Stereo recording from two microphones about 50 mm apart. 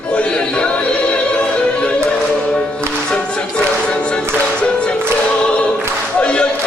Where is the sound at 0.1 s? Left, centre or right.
Left.